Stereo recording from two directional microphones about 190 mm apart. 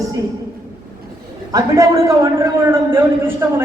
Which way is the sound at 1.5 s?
15° right (ahead or behind).